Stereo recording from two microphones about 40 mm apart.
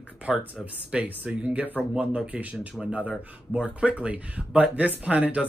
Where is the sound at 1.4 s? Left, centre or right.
Right.